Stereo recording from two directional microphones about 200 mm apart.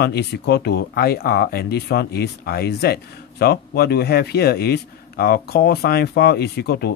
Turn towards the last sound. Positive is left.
turn(degrees=55)  # may be behind; listen again after turning